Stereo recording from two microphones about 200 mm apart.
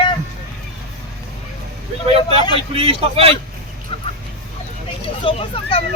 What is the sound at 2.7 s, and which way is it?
Speech, 30° right (ahead or behind).